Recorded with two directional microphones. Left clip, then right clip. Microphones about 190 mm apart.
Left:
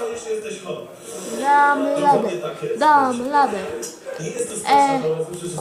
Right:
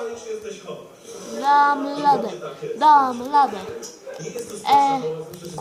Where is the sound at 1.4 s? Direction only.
20° right (ahead or behind).